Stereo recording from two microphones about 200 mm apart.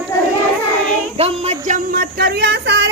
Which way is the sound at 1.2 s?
30° right (ahead or behind).